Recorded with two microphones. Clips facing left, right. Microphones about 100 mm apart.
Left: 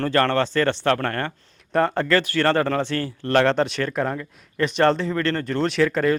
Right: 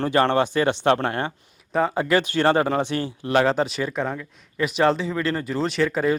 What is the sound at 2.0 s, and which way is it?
Speech, 20° right (ahead or behind).